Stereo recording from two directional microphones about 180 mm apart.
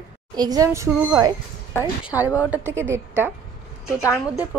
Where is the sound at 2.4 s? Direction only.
10° right (ahead or behind).